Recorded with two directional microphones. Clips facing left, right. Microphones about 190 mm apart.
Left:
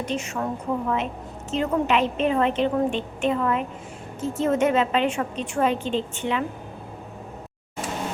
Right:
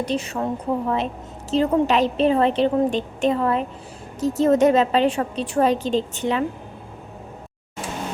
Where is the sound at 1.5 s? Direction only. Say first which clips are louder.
Right 4 dB; 35° right (ahead or behind).